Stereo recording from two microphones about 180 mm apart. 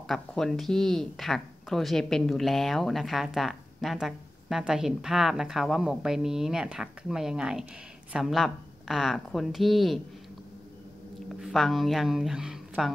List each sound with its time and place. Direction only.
0.0 s speech: centre (ahead or behind)
11.4 s speech: centre (ahead or behind)